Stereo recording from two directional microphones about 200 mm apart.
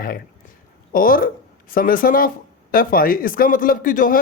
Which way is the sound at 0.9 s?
45° left (ahead or behind).